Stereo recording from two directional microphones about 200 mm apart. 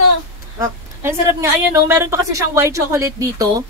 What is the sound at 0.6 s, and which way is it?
Speech, 15° right (ahead or behind).